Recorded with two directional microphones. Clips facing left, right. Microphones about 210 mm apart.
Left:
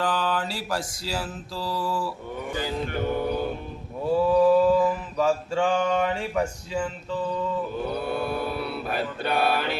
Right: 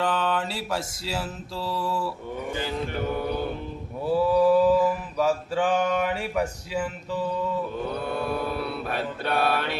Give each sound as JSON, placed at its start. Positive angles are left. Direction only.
{"t": 0.0, "sound": "mantra", "side_deg": 0}
{"t": 4.0, "sound": "mantra", "side_deg": -5}
{"t": 7.9, "sound": "mantra", "side_deg": 5}